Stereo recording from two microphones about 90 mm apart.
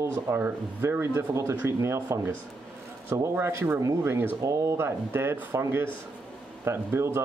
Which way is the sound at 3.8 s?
35° right (ahead or behind).